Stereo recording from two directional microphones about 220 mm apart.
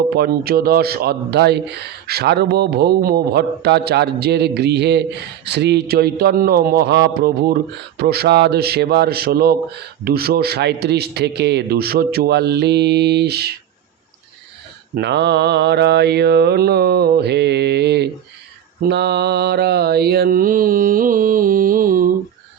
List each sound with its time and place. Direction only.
0.1 s a man's voice: 45° right (ahead or behind)
14.9 s a man's voice: 50° right (ahead or behind)
18.8 s mantra: 50° right (ahead or behind)